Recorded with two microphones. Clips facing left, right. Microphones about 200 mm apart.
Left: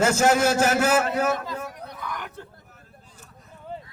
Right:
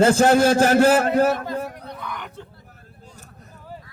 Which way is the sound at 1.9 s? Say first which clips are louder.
Right 1 dB; 5° left (ahead or behind).